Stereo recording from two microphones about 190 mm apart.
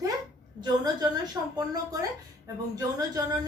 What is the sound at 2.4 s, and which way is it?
Speech, 20° right (ahead or behind).